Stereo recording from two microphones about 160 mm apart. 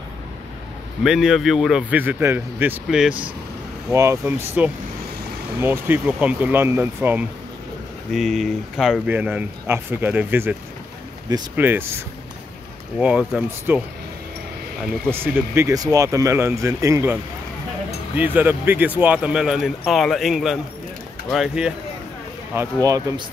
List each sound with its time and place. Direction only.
1.0 s a man's voice: 5° right (ahead or behind)
3.9 s speech: 20° right (ahead or behind)
8.1 s a man's voice: centre (ahead or behind)
9.1 s speech: 10° right (ahead or behind)
11.5 s speech: 10° right (ahead or behind)
13.0 s speech: 5° right (ahead or behind)
15.0 s a man's voice: 15° right (ahead or behind)
22.5 s speech: 15° right (ahead or behind)